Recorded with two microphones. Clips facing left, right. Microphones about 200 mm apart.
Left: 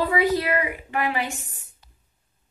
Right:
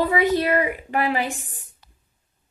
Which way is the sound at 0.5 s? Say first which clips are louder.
Right 4 dB; 35° right (ahead or behind).